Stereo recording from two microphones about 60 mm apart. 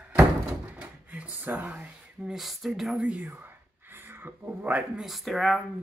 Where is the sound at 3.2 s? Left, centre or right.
Right.